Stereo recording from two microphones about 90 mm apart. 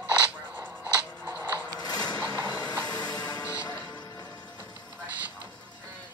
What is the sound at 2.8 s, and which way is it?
Music, 50° left (ahead or behind).